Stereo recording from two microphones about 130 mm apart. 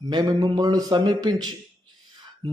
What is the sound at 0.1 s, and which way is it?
A man's voice, 30° right (ahead or behind).